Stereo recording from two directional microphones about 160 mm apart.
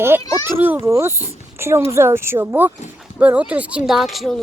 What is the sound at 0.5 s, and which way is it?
A woman's voice, 10° right (ahead or behind).